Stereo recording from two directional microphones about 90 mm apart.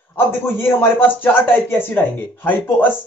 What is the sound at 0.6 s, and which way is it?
Speech, 20° left (ahead or behind).